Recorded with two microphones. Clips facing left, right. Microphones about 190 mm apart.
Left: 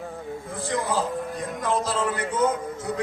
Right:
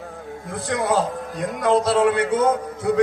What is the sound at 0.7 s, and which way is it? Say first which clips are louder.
A man's voice: right 5 dB; 65° right (ahead or behind).